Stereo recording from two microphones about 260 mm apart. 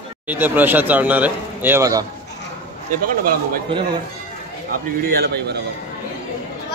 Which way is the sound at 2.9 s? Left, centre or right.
Right.